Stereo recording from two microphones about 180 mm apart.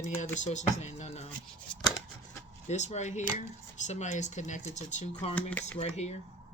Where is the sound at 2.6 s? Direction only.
40° left (ahead or behind).